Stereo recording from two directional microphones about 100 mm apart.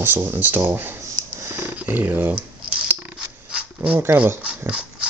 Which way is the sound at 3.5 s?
10° right (ahead or behind).